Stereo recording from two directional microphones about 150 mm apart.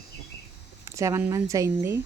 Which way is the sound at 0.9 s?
20° right (ahead or behind).